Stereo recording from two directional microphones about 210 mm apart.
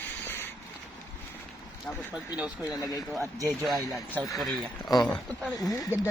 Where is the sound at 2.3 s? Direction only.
5° right (ahead or behind).